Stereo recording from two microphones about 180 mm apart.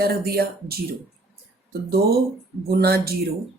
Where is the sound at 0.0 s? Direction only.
60° right (ahead or behind).